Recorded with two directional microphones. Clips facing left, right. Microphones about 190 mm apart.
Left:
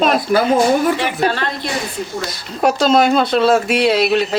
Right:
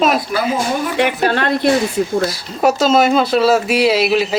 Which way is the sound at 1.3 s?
55° right (ahead or behind).